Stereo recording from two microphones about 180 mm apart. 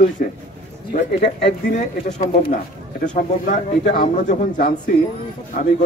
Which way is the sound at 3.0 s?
45° left (ahead or behind).